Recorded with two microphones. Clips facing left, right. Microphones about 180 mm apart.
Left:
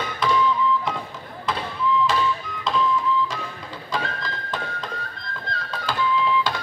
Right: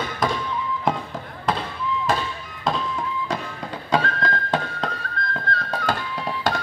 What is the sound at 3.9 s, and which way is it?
Music, 65° right (ahead or behind).